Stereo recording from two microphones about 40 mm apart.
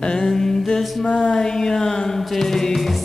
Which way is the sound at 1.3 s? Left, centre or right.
Centre.